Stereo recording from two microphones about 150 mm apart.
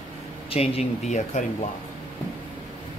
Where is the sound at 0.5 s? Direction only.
40° left (ahead or behind).